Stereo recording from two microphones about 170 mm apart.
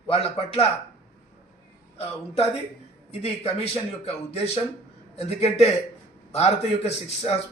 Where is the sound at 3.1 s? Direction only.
35° left (ahead or behind).